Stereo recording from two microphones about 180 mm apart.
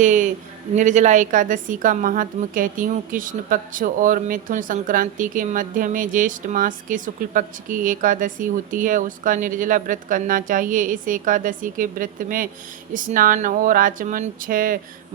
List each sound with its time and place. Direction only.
0.0 s a woman's voice: 45° right (ahead or behind)